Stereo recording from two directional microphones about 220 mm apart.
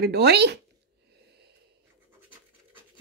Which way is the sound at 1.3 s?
50° right (ahead or behind).